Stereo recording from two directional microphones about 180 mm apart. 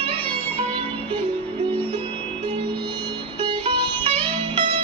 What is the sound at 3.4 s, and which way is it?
Music, 25° right (ahead or behind).